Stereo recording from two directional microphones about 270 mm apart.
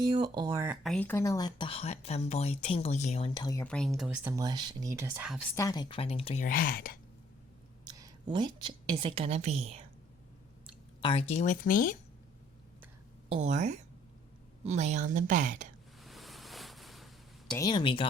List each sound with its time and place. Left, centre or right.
0.0 s speech: centre
0.9 s speech: centre
5.5 s speech: centre; by 6.9 s left
7.9 s a woman's voice: centre
11.0 s speech: left
13.3 s a woman's voice: right
16.0 s ocean: centre
17.5 s speech: centre